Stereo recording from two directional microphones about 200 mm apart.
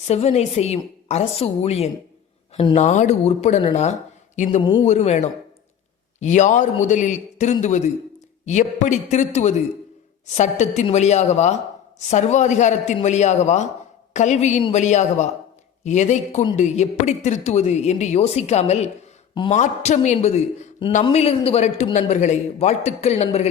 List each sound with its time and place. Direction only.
0.1 s a man's voice: 30° left (ahead or behind)